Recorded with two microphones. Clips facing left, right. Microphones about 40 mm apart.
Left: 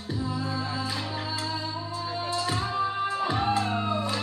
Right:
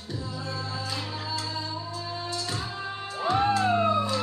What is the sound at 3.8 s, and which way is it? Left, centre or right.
Emergency vehicle, centre.